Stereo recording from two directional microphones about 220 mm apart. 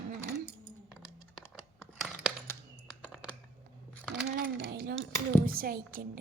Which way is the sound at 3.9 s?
5° left (ahead or behind).